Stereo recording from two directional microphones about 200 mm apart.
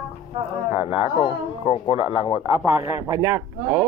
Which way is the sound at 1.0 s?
30° left (ahead or behind).